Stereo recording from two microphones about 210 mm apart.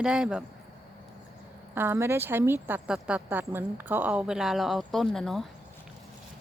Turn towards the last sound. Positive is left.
turn(degrees=0)  # may be behind; listen again after turning